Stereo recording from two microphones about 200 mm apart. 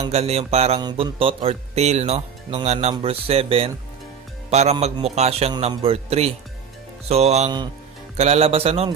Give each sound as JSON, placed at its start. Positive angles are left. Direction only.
{"t": 0.1, "sound": "a man's voice", "side_deg": -30}
{"t": 0.7, "sound": "a man's voice", "side_deg": -20}